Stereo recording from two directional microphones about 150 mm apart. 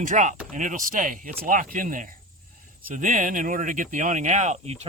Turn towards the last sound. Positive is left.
turn(degrees=-45)  # may be behind; listen again after turning